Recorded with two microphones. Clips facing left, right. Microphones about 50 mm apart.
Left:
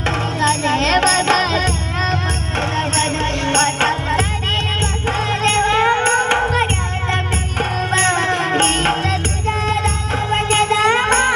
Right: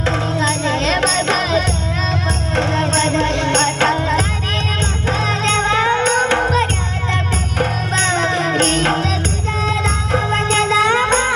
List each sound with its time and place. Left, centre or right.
0.3 s music: left
2.6 s music: left
5.4 s music: left
6.4 s music: centre
7.6 s music: left
10.3 s music: left